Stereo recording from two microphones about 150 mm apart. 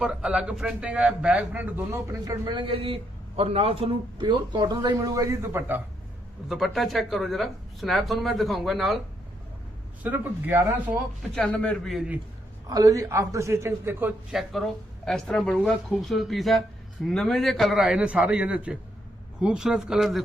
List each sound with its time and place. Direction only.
0.0 s a man's voice: 5° right (ahead or behind)
6.5 s speech: centre (ahead or behind)
10.0 s speech: 10° right (ahead or behind)
11.2 s a man's voice: 5° left (ahead or behind)
11.9 s speech: 10° right (ahead or behind)
12.6 s a man's voice: 25° right (ahead or behind)
15.0 s speech: 5° left (ahead or behind)